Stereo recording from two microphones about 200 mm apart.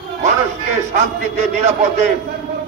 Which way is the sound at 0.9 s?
35° right (ahead or behind).